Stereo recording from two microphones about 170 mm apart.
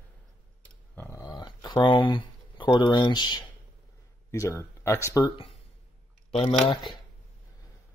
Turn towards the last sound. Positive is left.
turn(degrees=35)  # may be behind; listen again after turning